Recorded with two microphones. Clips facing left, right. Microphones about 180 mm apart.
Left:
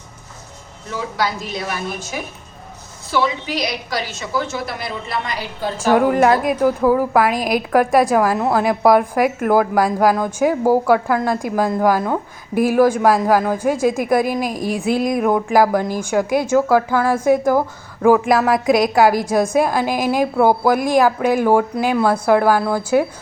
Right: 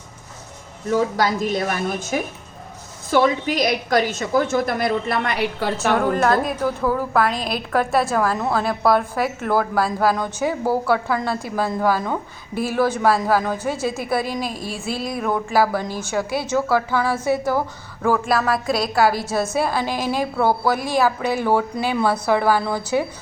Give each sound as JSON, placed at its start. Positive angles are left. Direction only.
{"t": 0.9, "sound": "a woman's voice", "side_deg": -45}
{"t": 5.9, "sound": "a woman's voice", "side_deg": 10}